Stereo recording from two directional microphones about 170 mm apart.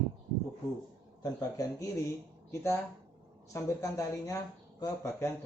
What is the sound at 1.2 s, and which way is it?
Speech, 20° left (ahead or behind).